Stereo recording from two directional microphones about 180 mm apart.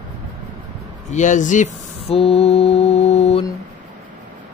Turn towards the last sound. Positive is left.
turn(degrees=35)  # may be behind; listen again after turning